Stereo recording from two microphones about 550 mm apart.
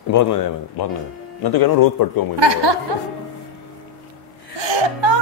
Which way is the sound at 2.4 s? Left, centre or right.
Right.